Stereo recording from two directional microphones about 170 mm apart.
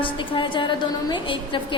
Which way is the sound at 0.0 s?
30° left (ahead or behind).